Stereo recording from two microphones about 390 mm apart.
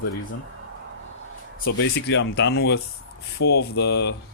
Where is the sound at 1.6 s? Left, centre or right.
Left.